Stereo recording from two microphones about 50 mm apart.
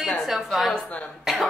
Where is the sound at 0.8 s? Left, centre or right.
Left.